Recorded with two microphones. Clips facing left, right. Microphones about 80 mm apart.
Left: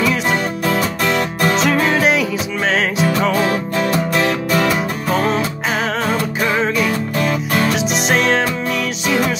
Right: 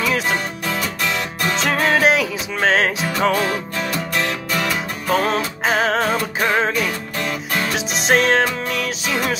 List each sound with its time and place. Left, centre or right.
0.7 s music: left
1.7 s music: right
5.1 s music: right